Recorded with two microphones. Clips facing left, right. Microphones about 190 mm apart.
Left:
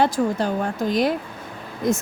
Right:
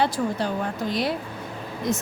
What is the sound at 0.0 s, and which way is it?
A woman's voice, 45° left (ahead or behind).